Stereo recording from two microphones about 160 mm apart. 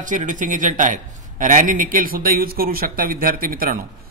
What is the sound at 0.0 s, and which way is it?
Speech, 55° right (ahead or behind).